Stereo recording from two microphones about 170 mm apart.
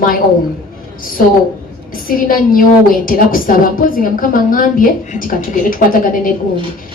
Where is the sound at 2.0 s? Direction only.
55° left (ahead or behind).